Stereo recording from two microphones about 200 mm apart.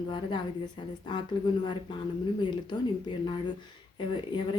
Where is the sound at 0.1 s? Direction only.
25° left (ahead or behind).